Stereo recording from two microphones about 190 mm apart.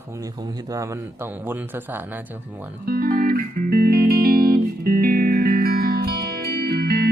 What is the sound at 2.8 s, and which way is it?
Music, 50° right (ahead or behind).